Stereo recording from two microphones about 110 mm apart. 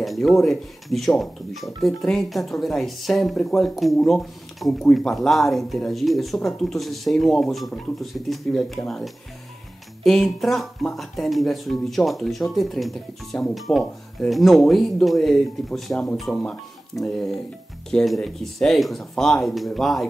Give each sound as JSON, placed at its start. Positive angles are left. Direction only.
{"t": 0.0, "sound": "speech", "side_deg": 0}